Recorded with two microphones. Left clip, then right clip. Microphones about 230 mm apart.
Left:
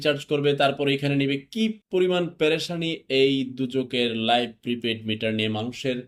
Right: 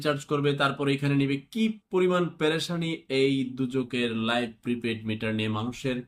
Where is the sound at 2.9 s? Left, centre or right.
Right.